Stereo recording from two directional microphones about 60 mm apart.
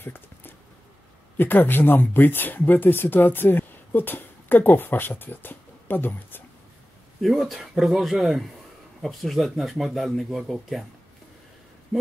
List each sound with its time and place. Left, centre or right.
0.0 s a sound: left
1.4 s speech: left
7.2 s speech: centre